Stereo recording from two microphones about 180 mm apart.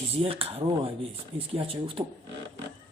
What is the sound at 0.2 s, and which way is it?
Speech, 30° right (ahead or behind).